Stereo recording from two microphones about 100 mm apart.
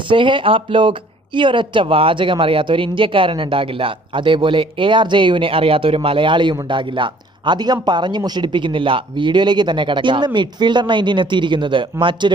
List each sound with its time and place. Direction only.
0.1 s speech: 55° right (ahead or behind)